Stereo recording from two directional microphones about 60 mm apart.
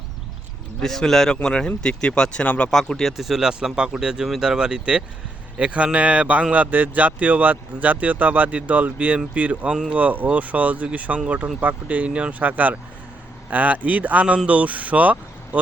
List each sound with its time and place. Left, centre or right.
0.8 s speech: centre
2.6 s speech: centre; by 15.2 s right